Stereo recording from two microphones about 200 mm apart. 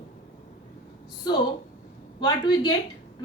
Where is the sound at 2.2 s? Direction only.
20° left (ahead or behind).